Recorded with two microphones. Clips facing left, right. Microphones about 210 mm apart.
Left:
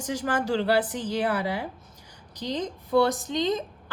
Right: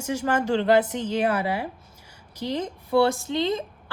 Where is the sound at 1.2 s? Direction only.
10° right (ahead or behind).